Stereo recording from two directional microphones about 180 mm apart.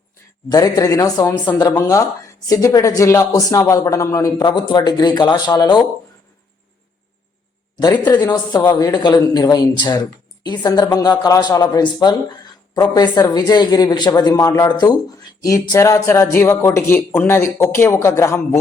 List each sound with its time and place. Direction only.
0.5 s speech: 20° left (ahead or behind)
7.8 s speech: 25° left (ahead or behind)